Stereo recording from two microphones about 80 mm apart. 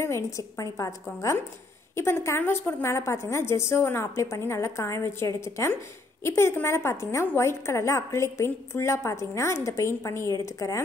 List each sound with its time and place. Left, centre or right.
0.0 s a woman's voice: left